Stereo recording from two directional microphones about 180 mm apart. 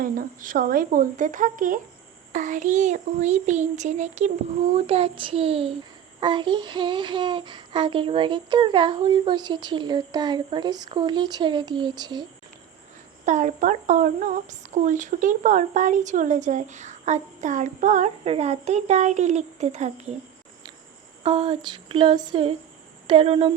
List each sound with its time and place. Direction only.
0.0 s a sound: 50° right (ahead or behind)
2.3 s a child's voice: 45° right (ahead or behind)
6.1 s child singing: 25° right (ahead or behind)
13.2 s a sound: 45° right (ahead or behind)
21.2 s child singing: 25° right (ahead or behind)
23.0 s a child's voice: 30° right (ahead or behind)